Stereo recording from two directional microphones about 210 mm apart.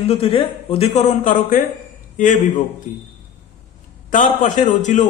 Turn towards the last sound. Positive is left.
turn(degrees=35)  # may be behind; listen again after turning